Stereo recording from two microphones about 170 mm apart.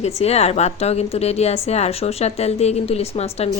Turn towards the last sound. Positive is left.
turn(degrees=40)  # may be behind; listen again after turning